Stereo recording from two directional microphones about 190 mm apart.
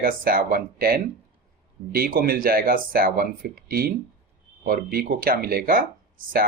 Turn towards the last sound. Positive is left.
turn(degrees=-50)  # may be behind; listen again after turning